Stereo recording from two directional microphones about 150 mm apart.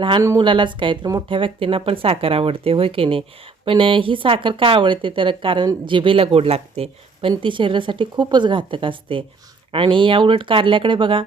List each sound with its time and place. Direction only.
0.2 s a woman's voice: 20° right (ahead or behind)
0.4 s speech: 30° right (ahead or behind)